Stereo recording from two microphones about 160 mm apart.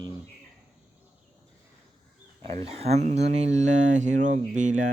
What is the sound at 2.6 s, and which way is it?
Speech, 40° right (ahead or behind).